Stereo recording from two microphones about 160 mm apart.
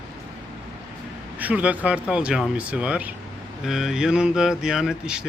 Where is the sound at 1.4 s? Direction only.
10° right (ahead or behind).